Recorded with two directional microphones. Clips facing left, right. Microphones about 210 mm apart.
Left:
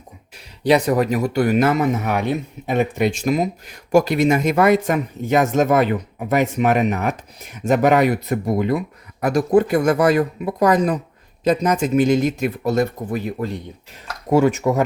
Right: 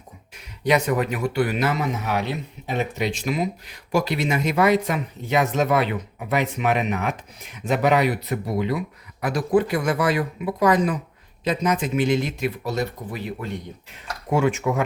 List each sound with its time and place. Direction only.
0.3 s speech: 30° left (ahead or behind)